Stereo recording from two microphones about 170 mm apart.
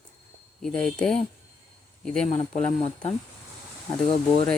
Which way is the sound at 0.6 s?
5° left (ahead or behind).